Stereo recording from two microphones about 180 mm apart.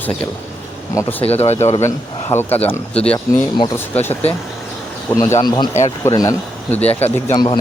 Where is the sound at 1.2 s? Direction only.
35° left (ahead or behind).